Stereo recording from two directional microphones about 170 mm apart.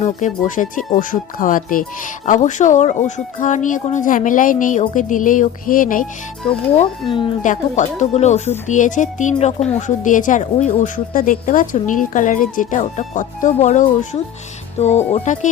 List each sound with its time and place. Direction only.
0.0 s speech: 45° left (ahead or behind)
7.1 s a woman's voice: 30° left (ahead or behind)
7.4 s speech: 50° left (ahead or behind)